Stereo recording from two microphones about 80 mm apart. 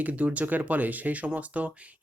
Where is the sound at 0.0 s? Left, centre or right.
Centre.